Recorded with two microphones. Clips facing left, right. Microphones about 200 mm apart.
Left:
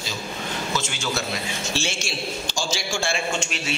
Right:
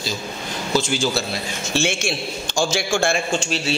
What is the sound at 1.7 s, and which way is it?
A man's voice, 55° right (ahead or behind).